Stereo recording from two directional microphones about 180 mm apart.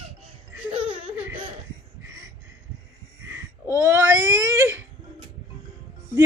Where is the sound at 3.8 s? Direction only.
10° right (ahead or behind).